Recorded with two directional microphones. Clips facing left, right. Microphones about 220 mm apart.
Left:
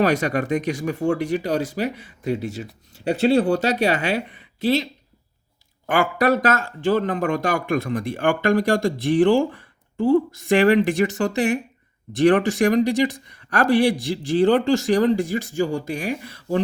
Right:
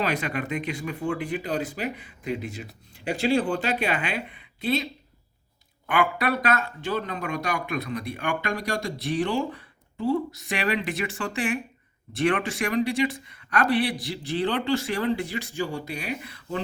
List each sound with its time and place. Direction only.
0.0 s speech: 45° left (ahead or behind)
5.8 s speech: 45° left (ahead or behind)